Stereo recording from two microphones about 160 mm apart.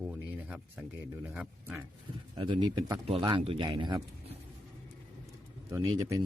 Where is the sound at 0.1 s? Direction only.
10° right (ahead or behind).